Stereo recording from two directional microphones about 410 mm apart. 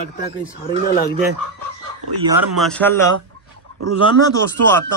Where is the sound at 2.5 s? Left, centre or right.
Centre.